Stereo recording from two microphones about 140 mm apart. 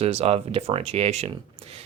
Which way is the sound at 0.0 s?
45° right (ahead or behind).